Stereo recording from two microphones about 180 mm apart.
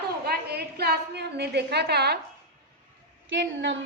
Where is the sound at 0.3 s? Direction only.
65° right (ahead or behind).